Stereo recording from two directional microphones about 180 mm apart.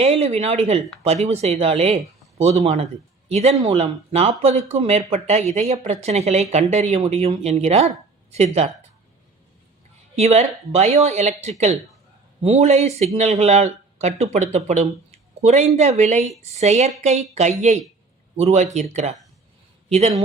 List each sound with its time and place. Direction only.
0.0 s speech: 35° right (ahead or behind)
10.2 s speech: 35° right (ahead or behind)